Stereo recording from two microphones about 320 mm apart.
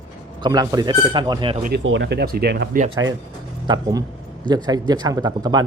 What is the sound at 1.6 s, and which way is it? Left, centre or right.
Speech, right.